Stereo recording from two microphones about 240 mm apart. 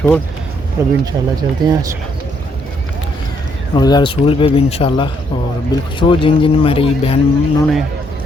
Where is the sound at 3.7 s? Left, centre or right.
Centre.